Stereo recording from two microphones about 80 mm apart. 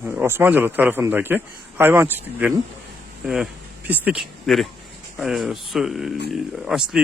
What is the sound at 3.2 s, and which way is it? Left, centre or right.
Speech, centre.